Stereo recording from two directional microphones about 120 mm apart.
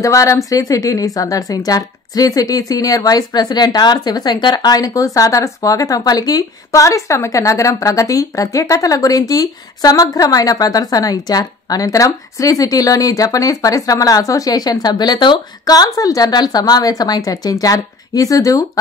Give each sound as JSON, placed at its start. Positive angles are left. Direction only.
{"t": 0.0, "sound": "a woman's voice", "side_deg": 25}